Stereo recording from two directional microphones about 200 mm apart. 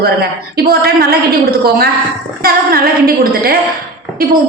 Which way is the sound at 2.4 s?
45° right (ahead or behind).